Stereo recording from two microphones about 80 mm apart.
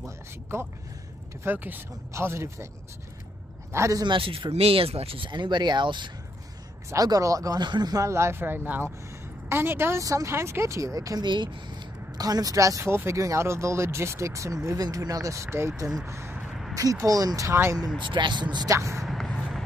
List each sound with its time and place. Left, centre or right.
0.0 s speech: right
2.1 s speech: right
3.9 s speech: right
6.9 s speech: right
7.6 s speech: right
8.0 s speech: right
11.2 s speech: right
16.7 s speech: right
17.5 s speech: right
17.9 s speech: right
18.7 s speech: right
19.0 s a sound: centre